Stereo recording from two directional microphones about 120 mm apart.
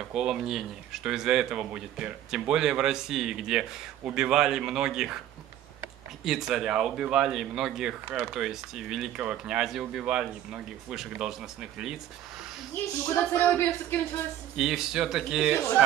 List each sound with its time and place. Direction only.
0.1 s speech: 5° right (ahead or behind)
6.2 s speech: 5° right (ahead or behind)
13.0 s speech: 15° left (ahead or behind)
14.6 s speech: 5° right (ahead or behind)